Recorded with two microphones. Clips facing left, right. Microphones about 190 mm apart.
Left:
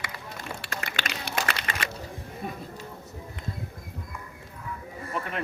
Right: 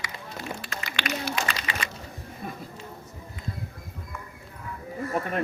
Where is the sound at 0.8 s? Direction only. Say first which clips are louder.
Right 7 dB; 50° left (ahead or behind).